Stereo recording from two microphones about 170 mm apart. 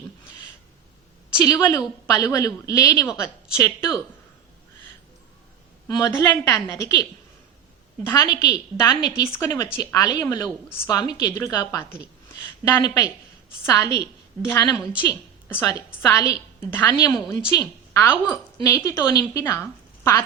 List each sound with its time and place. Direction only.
1.4 s a woman's voice: 20° left (ahead or behind)
5.9 s a woman's voice: 15° left (ahead or behind)
8.1 s a woman's voice: 25° left (ahead or behind)